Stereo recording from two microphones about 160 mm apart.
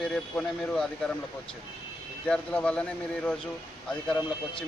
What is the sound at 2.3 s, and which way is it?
A man's voice, 5° left (ahead or behind).